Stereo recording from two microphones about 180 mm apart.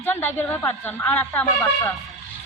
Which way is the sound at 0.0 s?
10° left (ahead or behind).